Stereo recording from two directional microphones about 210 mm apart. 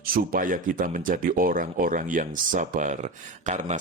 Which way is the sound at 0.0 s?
45° right (ahead or behind).